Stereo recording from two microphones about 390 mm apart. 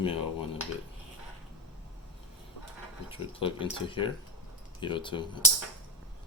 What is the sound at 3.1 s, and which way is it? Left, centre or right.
Speech, centre.